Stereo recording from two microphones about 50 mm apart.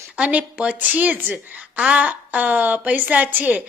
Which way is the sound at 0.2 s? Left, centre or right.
Right.